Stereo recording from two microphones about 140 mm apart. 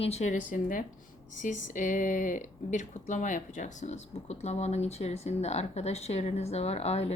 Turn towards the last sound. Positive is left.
turn(degrees=50)  # may be behind; listen again after turning